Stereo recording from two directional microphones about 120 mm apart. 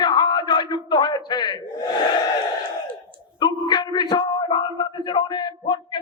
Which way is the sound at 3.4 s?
35° left (ahead or behind).